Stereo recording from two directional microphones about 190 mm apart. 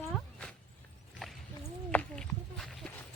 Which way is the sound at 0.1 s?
5° left (ahead or behind).